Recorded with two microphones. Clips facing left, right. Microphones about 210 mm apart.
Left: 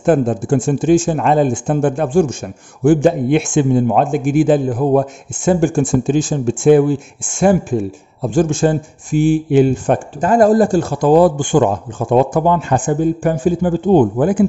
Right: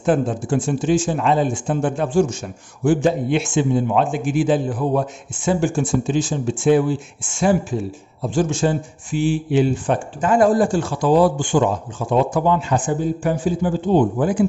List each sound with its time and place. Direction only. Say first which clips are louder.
0.0 s speech: left 5 dB; 50° left (ahead or behind)